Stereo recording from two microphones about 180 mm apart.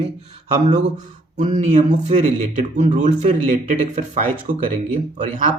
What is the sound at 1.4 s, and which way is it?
Speech, 40° right (ahead or behind).